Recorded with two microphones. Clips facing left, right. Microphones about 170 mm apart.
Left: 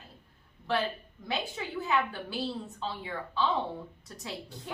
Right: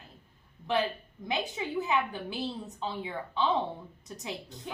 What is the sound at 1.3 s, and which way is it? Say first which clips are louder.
A woman's voice: right 2 dB; 20° right (ahead or behind).